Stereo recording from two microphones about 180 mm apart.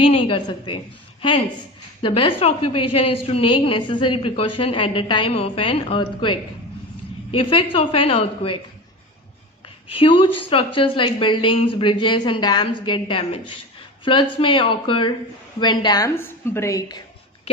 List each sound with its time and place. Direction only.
0.0 s a woman's voice: 30° left (ahead or behind)
2.0 s a woman's voice: 30° left (ahead or behind)
9.9 s a woman's voice: 30° left (ahead or behind)